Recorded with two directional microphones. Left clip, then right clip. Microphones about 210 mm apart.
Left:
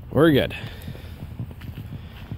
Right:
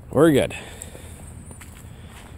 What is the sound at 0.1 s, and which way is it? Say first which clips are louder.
Speech: right 1 dB; 20° right (ahead or behind).